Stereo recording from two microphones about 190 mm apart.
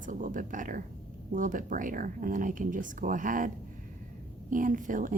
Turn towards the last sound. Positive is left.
turn(degrees=-45)  # may be behind; listen again after turning